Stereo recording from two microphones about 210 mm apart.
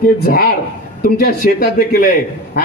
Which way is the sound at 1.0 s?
45° left (ahead or behind).